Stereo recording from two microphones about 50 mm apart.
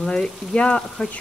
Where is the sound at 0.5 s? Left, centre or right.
Left.